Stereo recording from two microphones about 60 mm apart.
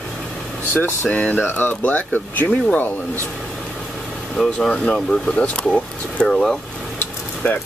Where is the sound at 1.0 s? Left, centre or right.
Centre.